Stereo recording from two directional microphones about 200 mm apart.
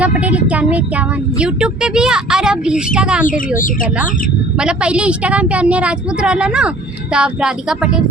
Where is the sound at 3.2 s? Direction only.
40° left (ahead or behind).